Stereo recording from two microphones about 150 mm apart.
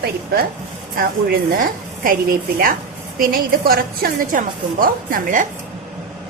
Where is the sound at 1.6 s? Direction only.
65° right (ahead or behind).